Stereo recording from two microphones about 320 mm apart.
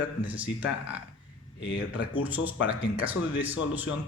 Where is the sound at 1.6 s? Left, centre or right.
Left.